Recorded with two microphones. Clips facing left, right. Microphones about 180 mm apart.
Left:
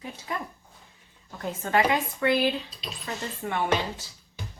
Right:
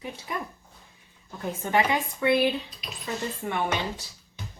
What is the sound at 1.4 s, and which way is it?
Speech, 20° right (ahead or behind).